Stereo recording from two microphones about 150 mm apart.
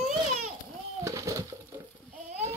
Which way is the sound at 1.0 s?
20° right (ahead or behind).